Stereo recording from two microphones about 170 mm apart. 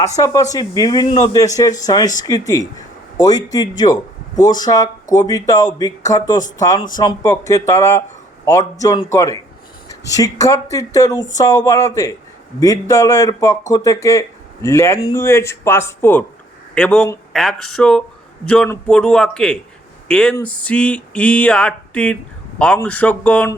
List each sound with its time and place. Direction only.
0.2 s a man's voice: 20° left (ahead or behind)